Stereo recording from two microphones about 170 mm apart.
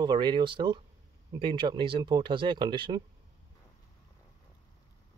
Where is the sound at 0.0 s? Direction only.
25° right (ahead or behind).